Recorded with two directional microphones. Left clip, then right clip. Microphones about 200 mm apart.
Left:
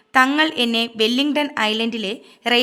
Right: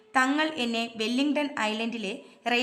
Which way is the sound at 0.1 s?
30° left (ahead or behind).